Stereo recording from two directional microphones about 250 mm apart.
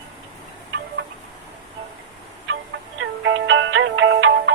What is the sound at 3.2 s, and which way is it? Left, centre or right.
Music, right.